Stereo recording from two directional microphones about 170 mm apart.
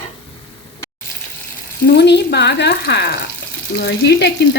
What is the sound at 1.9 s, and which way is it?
Speech, 80° left.